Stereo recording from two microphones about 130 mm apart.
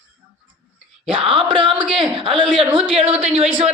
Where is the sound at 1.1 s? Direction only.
45° right (ahead or behind).